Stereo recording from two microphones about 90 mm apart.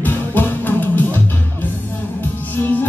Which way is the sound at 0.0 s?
20° left (ahead or behind).